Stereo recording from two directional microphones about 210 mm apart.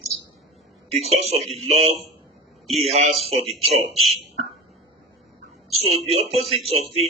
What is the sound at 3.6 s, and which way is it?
Speech, 30° right (ahead or behind).